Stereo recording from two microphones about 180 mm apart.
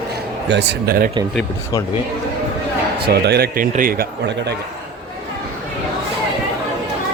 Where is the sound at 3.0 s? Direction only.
65° right (ahead or behind).